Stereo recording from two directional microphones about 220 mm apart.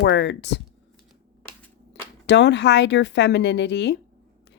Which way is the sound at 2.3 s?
50° left (ahead or behind).